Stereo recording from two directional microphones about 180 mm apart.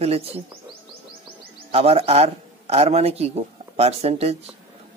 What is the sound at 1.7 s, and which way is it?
A man's voice, 35° right (ahead or behind).